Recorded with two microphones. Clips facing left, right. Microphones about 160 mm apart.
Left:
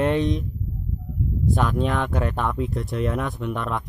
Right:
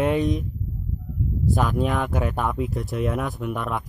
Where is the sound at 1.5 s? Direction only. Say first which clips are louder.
Even; centre (ahead or behind).